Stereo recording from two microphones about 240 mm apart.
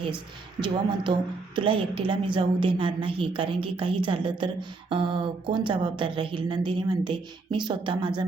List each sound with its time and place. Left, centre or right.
0.6 s a woman's voice: centre